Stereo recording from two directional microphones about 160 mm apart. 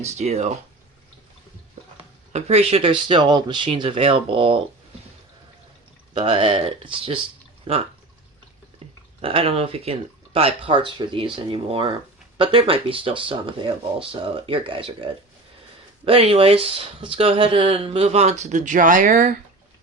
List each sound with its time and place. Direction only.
0.0 s speech: 40° right (ahead or behind)
2.3 s speech: 40° right (ahead or behind)
6.1 s speech: 30° right (ahead or behind)
8.8 s a sound: 40° right (ahead or behind)
9.2 s speech: 35° right (ahead or behind); by 19.3 s 60° right (ahead or behind)